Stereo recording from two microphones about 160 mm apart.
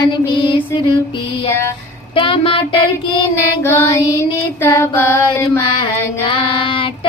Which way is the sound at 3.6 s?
15° left (ahead or behind).